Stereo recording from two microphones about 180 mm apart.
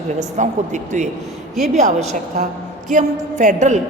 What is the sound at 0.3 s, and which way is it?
Speech, 40° right (ahead or behind).